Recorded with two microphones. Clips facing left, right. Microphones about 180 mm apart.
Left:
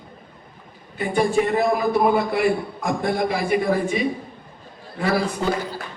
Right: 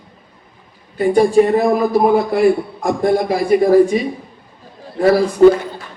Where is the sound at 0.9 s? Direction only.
40° right (ahead or behind).